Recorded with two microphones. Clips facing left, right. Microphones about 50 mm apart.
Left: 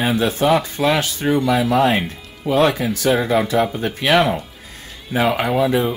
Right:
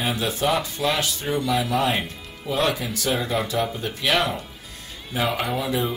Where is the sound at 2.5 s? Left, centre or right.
Left.